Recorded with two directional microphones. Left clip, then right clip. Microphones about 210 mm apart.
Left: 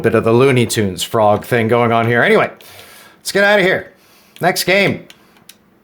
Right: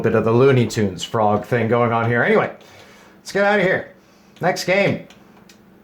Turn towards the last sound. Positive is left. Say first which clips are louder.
# left 4 dB
turn(degrees=40)  # may be behind; listen again after turning